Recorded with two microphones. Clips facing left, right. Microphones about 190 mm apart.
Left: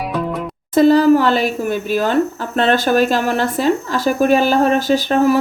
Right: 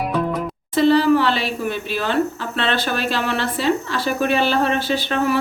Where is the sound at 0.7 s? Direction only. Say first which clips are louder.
Left 4 dB; 45° left (ahead or behind).